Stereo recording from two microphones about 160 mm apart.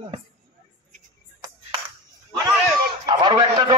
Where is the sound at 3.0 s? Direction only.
25° right (ahead or behind).